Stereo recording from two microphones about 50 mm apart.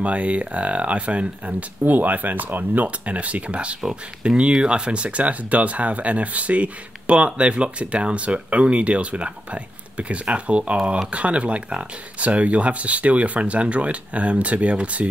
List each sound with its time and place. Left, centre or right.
0.0 s speech: right